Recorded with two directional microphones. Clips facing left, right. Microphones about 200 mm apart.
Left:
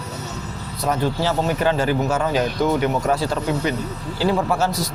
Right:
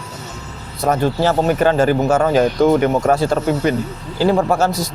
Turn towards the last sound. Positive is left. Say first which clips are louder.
# right 4 dB
turn(degrees=-45)  # may be behind; listen again after turning